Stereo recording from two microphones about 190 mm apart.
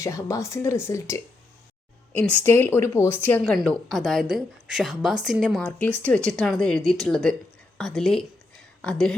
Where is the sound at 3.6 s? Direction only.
Centre (ahead or behind).